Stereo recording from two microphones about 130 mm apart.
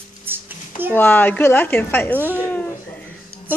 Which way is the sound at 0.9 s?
15° left (ahead or behind).